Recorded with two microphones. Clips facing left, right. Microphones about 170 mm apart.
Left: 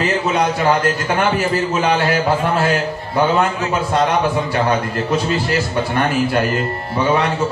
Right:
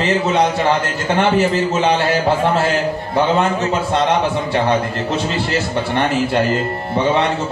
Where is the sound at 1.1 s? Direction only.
25° right (ahead or behind).